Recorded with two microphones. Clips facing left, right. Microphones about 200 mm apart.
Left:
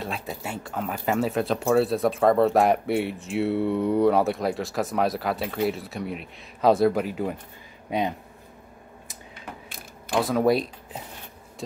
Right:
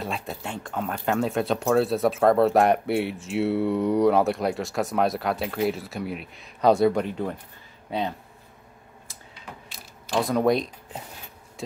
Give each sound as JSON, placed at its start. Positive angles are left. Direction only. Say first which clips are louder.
{"t": 0.0, "sound": "speech", "louder": "even", "side_deg": 0}
{"t": 9.3, "sound": "mechanisms", "louder": "left 2 dB", "side_deg": 55}
{"t": 10.2, "sound": "speech", "louder": "even", "side_deg": 5}